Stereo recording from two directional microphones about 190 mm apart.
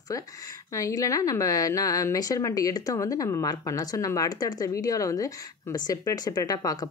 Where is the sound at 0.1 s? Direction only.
15° left (ahead or behind).